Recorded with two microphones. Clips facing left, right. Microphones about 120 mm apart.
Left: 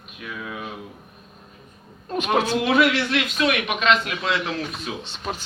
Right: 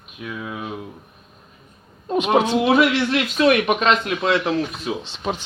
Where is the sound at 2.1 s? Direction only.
25° right (ahead or behind).